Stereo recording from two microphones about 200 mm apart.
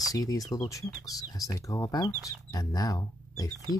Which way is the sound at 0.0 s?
15° left (ahead or behind).